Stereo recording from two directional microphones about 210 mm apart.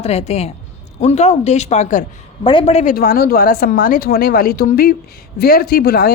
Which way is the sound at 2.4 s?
25° left (ahead or behind).